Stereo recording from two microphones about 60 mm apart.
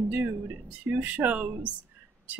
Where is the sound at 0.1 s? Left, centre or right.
Right.